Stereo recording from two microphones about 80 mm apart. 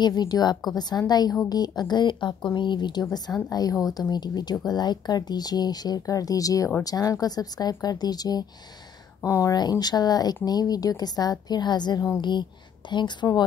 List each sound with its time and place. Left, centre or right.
0.0 s a woman's voice: left
9.2 s speech: left